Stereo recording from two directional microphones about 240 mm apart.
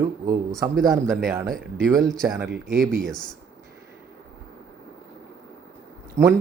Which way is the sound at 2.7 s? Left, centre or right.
Right.